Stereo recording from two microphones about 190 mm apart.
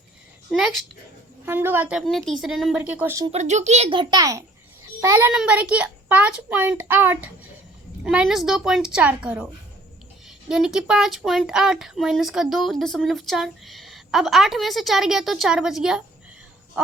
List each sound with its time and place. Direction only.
1.5 s a child's voice: 10° right (ahead or behind)
3.3 s a child's voice: 35° right (ahead or behind); by 16.0 s 5° right (ahead or behind)